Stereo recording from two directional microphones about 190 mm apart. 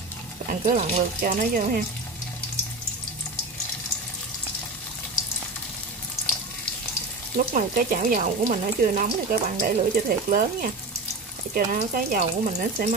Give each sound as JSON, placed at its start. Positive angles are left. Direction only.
{"t": 0.5, "sound": "speech", "side_deg": -40}
{"t": 7.5, "sound": "speech", "side_deg": -45}